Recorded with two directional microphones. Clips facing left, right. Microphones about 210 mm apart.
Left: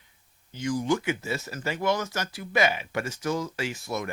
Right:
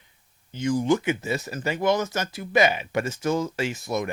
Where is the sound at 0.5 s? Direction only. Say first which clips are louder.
Right 4 dB; 25° right (ahead or behind).